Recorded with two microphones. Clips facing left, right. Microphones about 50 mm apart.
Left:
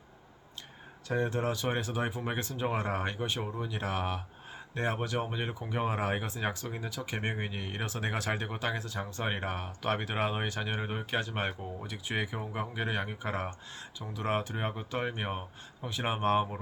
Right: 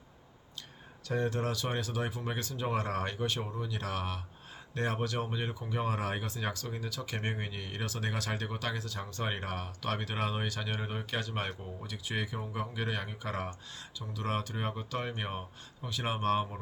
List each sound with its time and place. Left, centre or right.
1.0 s speech: left